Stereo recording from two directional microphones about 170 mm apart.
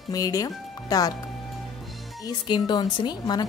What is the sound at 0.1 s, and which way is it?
A woman's voice, 20° left (ahead or behind).